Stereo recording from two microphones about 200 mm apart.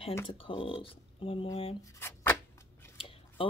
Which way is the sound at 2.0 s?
10° left (ahead or behind).